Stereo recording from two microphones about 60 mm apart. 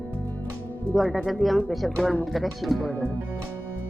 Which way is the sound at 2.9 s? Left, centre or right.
Left.